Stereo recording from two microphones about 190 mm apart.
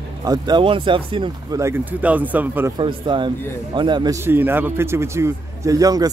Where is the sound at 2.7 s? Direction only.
25° right (ahead or behind).